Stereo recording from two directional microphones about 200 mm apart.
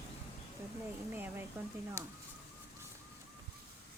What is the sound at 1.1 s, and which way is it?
Speech, 10° right (ahead or behind).